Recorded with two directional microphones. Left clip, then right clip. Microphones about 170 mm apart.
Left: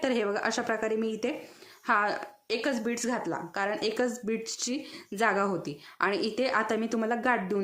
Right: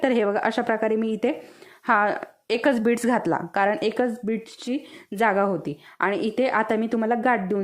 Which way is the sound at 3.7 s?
40° right (ahead or behind).